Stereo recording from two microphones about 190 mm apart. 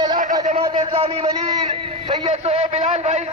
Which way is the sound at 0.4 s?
30° right (ahead or behind).